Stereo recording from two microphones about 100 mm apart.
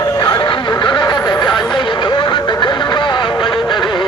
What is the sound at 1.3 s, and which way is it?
Vehicle, 45° left (ahead or behind).